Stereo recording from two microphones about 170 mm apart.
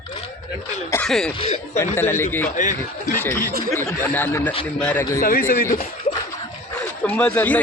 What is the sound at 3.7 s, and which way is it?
Speech, 15° left (ahead or behind).